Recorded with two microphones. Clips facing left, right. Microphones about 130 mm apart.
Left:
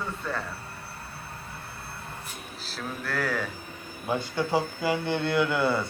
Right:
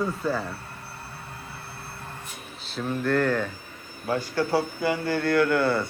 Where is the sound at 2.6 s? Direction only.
Centre (ahead or behind).